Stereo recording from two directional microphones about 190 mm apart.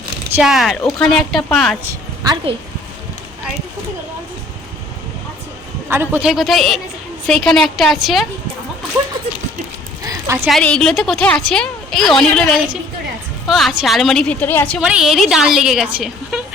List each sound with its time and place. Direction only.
0.3 s a woman's voice: centre (ahead or behind)
1.9 s a woman's voice: 20° right (ahead or behind)
5.9 s a woman's voice: 10° right (ahead or behind)
10.0 s clip-clop: 15° right (ahead or behind)
10.4 s a woman's voice: 5° left (ahead or behind)
14.8 s a woman's voice: 5° right (ahead or behind)